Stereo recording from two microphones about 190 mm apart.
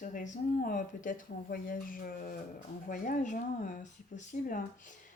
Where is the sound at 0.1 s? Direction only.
45° left (ahead or behind).